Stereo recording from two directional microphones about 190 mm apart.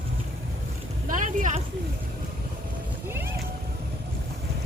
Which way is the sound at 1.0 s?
45° right (ahead or behind).